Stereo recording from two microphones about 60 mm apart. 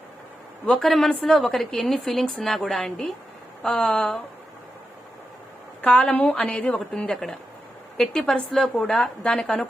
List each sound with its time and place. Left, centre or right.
0.6 s a woman's voice: centre
5.8 s a woman's voice: centre
7.1 s a woman's voice: centre